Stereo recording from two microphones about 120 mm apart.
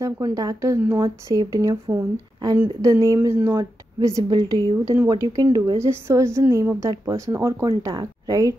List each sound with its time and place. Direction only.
0.0 s a woman's voice: 30° right (ahead or behind)
3.5 s speech: 30° right (ahead or behind)
4.8 s a woman's voice: 25° right (ahead or behind)
5.8 s a woman's voice: 20° right (ahead or behind)